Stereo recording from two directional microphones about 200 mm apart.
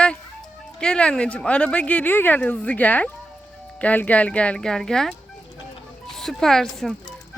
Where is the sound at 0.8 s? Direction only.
5° left (ahead or behind).